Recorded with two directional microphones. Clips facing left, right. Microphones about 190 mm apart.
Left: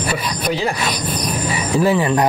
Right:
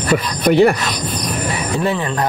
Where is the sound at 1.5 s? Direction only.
5° left (ahead or behind).